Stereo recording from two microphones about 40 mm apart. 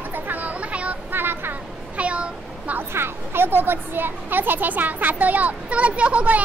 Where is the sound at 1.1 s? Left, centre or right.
Right.